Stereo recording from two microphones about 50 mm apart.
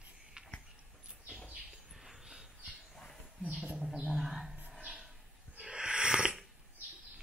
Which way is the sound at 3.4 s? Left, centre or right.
Right.